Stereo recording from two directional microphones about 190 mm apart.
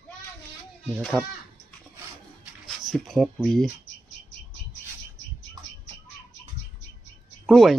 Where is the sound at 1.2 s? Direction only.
10° right (ahead or behind).